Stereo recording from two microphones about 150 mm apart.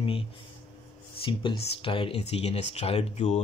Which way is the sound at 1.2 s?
35° left (ahead or behind).